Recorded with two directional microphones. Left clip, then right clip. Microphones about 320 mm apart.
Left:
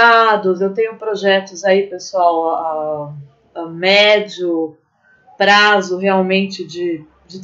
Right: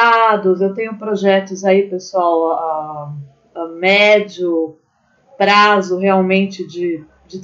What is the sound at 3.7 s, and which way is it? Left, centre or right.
Speech, centre.